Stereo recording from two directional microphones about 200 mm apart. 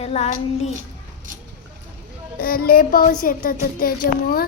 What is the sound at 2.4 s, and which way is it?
Music, 50° left (ahead or behind).